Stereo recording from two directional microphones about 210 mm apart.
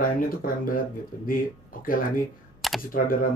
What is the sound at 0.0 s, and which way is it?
Speech, 40° left (ahead or behind).